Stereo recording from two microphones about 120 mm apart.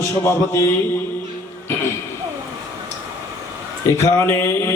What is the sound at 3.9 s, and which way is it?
Mantra, 20° left (ahead or behind).